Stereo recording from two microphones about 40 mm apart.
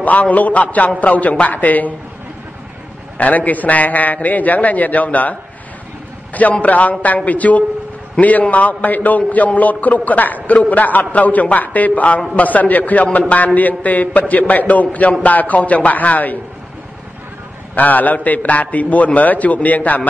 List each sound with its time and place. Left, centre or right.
0.0 s a man's voice: left
3.2 s a man's voice: left
6.6 s a man's voice: left
17.7 s a man's voice: left